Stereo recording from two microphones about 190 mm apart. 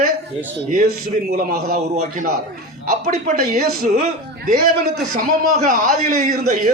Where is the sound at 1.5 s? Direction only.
50° right (ahead or behind); by 4.5 s 35° right (ahead or behind).